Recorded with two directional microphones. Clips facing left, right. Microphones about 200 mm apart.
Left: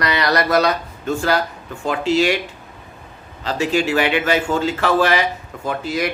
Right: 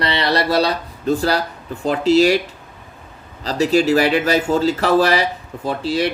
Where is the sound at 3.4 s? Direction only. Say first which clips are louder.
Right 4 dB; 40° right (ahead or behind).